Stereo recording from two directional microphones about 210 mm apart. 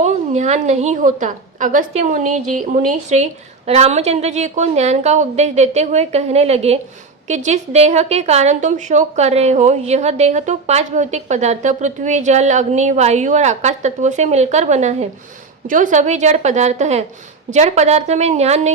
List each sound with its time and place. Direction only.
0.0 s a woman's voice: 35° right (ahead or behind)